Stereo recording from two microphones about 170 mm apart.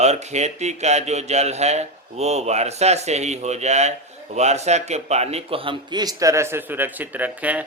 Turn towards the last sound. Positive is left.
turn(degrees=-10)  # may be behind; listen again after turning